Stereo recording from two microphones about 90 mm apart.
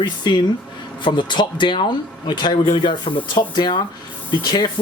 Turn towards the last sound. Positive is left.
turn(degrees=55)  # may be behind; listen again after turning